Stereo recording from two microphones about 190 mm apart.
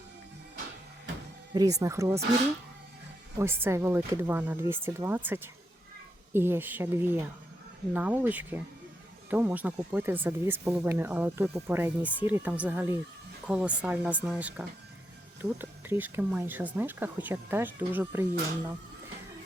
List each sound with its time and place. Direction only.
1.5 s speech: 15° right (ahead or behind)
3.3 s speech: 10° right (ahead or behind)